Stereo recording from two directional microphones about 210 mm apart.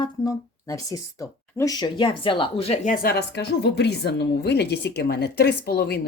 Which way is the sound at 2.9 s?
45° left (ahead or behind).